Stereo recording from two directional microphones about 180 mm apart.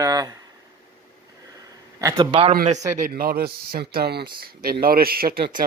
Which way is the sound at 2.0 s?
20° right (ahead or behind).